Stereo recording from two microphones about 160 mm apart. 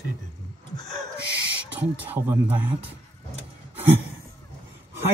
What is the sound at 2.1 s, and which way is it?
Speech, 10° right (ahead or behind).